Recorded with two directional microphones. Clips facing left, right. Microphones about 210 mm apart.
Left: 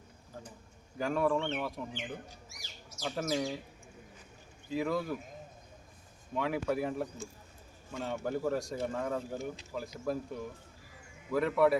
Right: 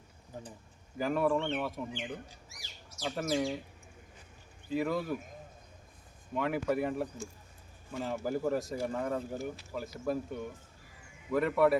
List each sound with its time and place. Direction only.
0.3 s speech: 20° right (ahead or behind)
0.9 s speech: centre (ahead or behind)
4.7 s speech: centre (ahead or behind)
6.3 s speech: centre (ahead or behind)